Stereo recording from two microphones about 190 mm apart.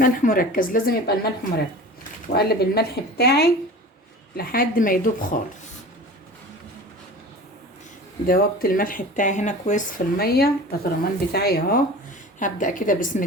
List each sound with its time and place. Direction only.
0.0 s speech: 45° left (ahead or behind)
8.3 s speech: 50° left (ahead or behind)
12.4 s speech: 45° left (ahead or behind)